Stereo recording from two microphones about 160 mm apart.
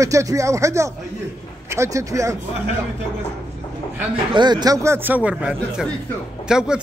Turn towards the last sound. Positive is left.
turn(degrees=-5)  # may be behind; listen again after turning